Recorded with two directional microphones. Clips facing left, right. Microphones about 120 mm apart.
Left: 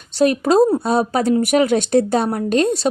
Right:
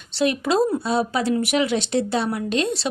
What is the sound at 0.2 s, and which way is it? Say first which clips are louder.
Speech: left 6 dB; 45° left (ahead or behind).